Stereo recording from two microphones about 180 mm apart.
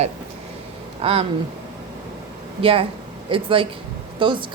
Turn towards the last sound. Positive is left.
turn(degrees=-25)  # may be behind; listen again after turning